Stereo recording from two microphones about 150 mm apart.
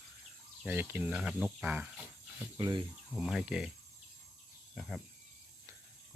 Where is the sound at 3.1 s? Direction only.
Centre (ahead or behind).